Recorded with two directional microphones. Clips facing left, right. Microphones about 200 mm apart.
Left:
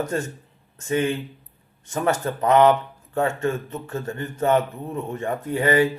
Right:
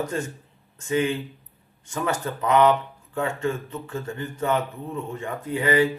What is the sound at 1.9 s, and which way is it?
Speech, 45° left (ahead or behind).